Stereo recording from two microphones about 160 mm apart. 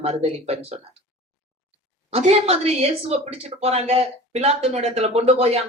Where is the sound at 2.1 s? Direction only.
40° right (ahead or behind).